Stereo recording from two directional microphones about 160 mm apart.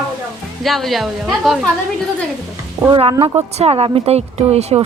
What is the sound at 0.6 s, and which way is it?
Speech, centre (ahead or behind).